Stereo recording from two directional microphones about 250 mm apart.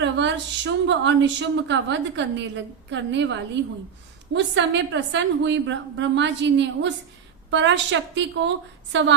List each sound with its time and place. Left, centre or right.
0.0 s a woman's voice: right